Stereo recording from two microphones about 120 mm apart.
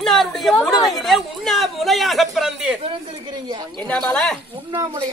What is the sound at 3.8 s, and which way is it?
Speech, 5° left (ahead or behind).